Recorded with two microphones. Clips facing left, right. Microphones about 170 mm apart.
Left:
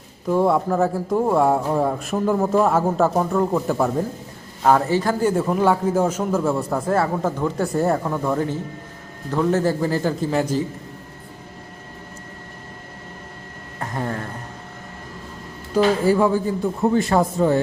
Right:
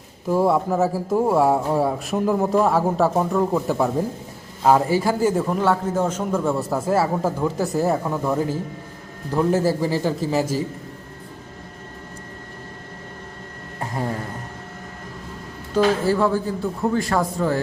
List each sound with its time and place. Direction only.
0.3 s speech: 5° right (ahead or behind)
13.9 s speech: 5° right (ahead or behind)
15.7 s speech: 15° left (ahead or behind)